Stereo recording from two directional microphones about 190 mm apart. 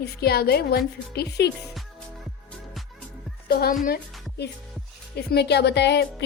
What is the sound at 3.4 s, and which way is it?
Speech, 55° left (ahead or behind).